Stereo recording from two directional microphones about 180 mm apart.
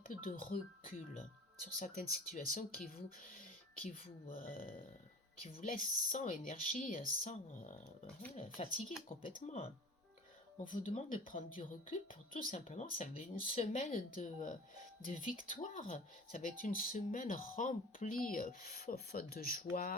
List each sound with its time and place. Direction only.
0.3 s speech: 50° left (ahead or behind)
10.6 s speech: 45° left (ahead or behind)